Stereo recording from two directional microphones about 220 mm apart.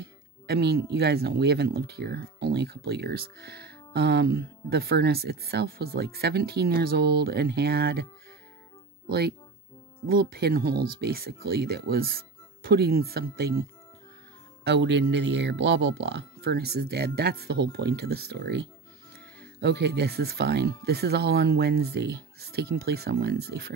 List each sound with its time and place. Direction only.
0.0 s speech: 45° right (ahead or behind)
10.0 s speech: 45° right (ahead or behind)
14.6 s speech: 50° right (ahead or behind)